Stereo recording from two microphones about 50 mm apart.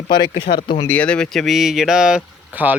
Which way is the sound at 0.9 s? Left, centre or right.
Left.